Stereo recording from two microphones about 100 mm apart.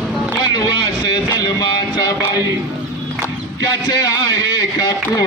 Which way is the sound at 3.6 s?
40° left (ahead or behind).